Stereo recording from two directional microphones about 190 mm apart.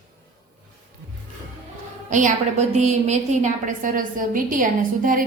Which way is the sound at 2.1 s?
40° right (ahead or behind).